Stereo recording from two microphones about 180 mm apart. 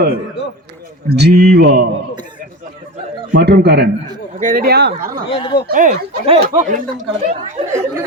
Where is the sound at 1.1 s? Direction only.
70° right (ahead or behind).